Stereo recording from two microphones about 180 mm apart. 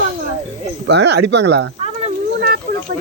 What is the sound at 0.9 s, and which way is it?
Speech, 70° right (ahead or behind).